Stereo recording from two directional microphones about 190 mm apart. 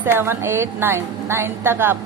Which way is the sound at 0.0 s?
10° right (ahead or behind).